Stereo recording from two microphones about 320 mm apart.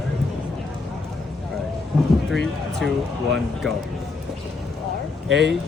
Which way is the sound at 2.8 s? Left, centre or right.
Centre.